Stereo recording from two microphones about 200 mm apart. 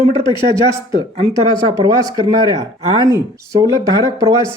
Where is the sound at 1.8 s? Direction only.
20° right (ahead or behind).